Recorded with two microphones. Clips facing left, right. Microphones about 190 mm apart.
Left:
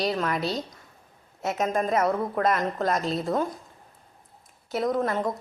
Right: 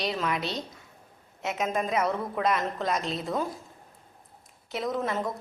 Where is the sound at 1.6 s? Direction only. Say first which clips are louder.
Left 3 dB; 45° left (ahead or behind).